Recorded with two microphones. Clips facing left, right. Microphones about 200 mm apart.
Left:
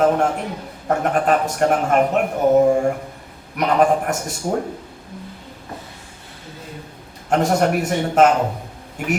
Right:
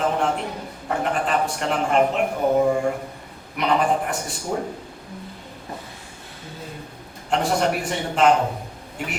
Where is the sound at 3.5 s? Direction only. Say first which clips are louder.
Left 4 dB; 45° left (ahead or behind).